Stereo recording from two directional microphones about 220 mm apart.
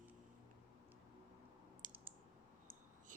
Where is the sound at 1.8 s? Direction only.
35° right (ahead or behind).